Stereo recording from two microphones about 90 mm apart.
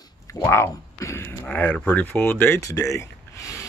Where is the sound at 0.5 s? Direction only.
30° left (ahead or behind).